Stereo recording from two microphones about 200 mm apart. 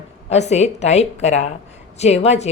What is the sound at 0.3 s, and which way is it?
Speech, 35° left (ahead or behind).